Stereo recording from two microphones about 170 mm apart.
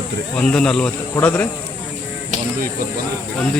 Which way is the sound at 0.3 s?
5° left (ahead or behind).